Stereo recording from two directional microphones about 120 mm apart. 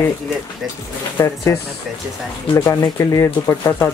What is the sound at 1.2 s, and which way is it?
Speech, 20° left (ahead or behind).